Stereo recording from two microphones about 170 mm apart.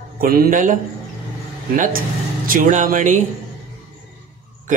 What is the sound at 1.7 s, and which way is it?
Speech, 50° right (ahead or behind).